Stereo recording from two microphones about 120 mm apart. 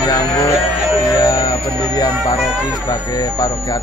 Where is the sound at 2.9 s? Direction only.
30° left (ahead or behind).